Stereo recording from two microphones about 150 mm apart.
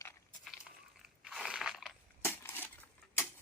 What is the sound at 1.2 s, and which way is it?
Crunch, 5° right (ahead or behind).